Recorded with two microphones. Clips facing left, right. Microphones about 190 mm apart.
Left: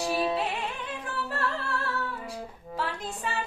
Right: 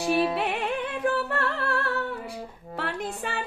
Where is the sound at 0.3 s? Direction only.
65° right (ahead or behind).